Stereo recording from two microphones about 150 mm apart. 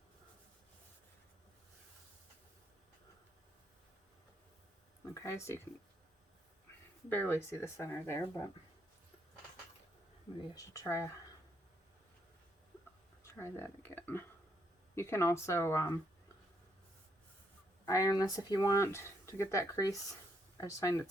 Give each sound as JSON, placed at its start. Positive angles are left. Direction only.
{"t": 5.1, "sound": "speech", "side_deg": 20}
{"t": 7.1, "sound": "speech", "side_deg": 15}
{"t": 10.5, "sound": "speech", "side_deg": 20}
{"t": 13.2, "sound": "speech", "side_deg": 15}
{"t": 17.8, "sound": "speech", "side_deg": 25}